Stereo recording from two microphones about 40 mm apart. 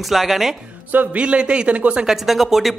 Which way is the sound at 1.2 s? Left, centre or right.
Right.